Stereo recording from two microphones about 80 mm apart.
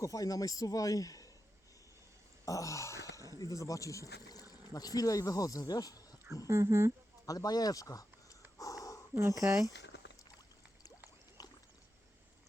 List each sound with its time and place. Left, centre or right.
0.0 s speech: left
2.4 s a sound: left
3.3 s speech: left
6.5 s speech: right
7.3 s speech: left
8.5 s snort: left
9.1 s speech: right
11.4 s rowboat: left